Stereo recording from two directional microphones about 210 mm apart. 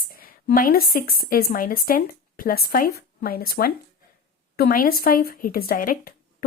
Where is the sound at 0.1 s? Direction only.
45° left (ahead or behind).